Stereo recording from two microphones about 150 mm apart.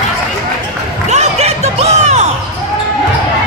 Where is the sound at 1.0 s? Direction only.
50° right (ahead or behind).